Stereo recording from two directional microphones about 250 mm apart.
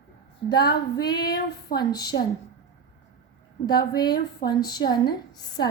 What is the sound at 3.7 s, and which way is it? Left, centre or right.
A woman's voice, centre.